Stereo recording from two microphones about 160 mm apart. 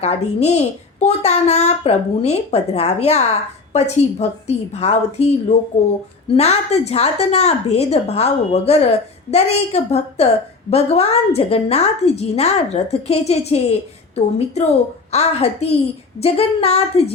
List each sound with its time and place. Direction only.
0.0 s a woman's voice: 40° left (ahead or behind)